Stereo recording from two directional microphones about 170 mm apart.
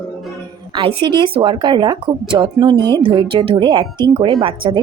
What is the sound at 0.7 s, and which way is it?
Speech, 30° right (ahead or behind).